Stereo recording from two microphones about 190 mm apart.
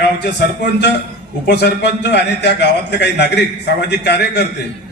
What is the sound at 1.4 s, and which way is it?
A man's voice, 60° left (ahead or behind).